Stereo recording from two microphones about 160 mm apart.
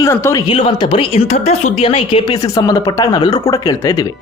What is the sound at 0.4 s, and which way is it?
A woman's voice, 30° left (ahead or behind).